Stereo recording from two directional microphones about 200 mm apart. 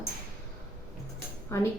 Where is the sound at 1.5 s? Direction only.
15° left (ahead or behind).